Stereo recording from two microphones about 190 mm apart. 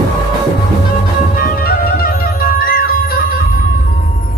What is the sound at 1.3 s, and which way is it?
Music, 50° left (ahead or behind).